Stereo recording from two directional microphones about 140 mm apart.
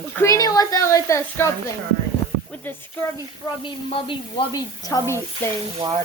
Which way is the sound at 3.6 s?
40° left (ahead or behind).